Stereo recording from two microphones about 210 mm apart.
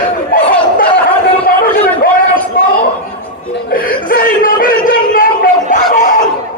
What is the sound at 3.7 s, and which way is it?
Chuckle, 40° left (ahead or behind).